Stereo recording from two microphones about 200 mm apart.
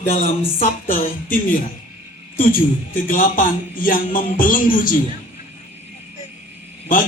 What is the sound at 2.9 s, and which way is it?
Speech, 45° left (ahead or behind).